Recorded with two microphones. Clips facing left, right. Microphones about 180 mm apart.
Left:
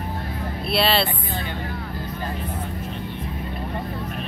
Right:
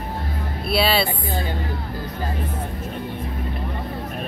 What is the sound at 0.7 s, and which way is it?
Speech, 5° right (ahead or behind).